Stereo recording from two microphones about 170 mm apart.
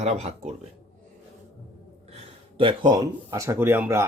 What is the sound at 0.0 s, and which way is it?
Speech, 40° right (ahead or behind).